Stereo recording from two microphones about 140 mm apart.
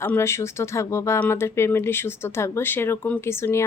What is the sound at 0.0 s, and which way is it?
Speech, 15° left (ahead or behind).